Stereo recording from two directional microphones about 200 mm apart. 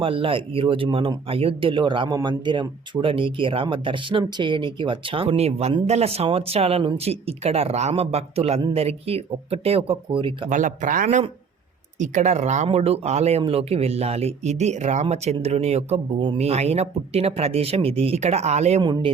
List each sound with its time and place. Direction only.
0.0 s speech: 25° right (ahead or behind)
10.5 s speech: 40° right (ahead or behind)